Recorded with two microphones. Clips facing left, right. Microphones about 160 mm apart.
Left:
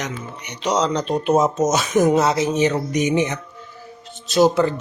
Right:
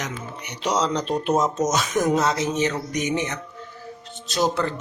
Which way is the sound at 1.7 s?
25° left (ahead or behind).